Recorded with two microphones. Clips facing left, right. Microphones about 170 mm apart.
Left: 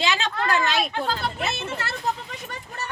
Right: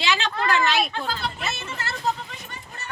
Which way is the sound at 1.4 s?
55° left (ahead or behind).